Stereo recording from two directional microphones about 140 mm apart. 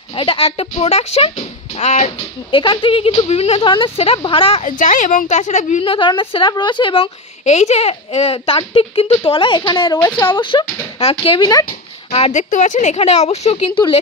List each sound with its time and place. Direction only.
0.1 s speech: 40° left (ahead or behind)
2.5 s speech: 35° left (ahead or behind)
4.6 s a woman's voice: 65° left (ahead or behind)
5.9 s speech: 35° left (ahead or behind)
7.4 s speech: 50° left (ahead or behind); by 11.6 s 30° left (ahead or behind)
12.1 s speech: 55° left (ahead or behind); by 13.9 s 35° left (ahead or behind)